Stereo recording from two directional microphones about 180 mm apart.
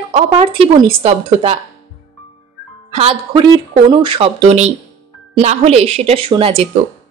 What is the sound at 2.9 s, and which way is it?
A woman's voice, 30° right (ahead or behind).